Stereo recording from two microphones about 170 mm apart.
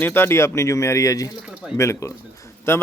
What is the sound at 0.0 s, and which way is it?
Speech, 10° left (ahead or behind).